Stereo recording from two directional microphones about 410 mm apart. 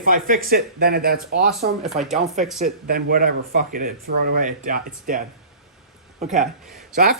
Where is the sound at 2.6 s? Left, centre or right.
Right.